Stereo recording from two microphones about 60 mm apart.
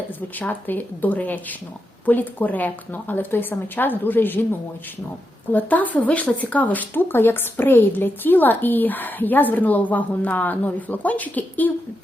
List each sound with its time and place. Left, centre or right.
0.3 s a woman's voice: left
5.5 s speech: left